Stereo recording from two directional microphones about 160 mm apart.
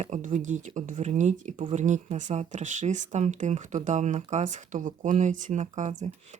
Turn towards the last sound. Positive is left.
turn(degrees=-50)  # may be behind; listen again after turning